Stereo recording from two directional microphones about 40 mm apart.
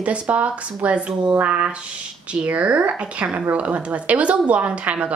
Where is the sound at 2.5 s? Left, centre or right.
Right.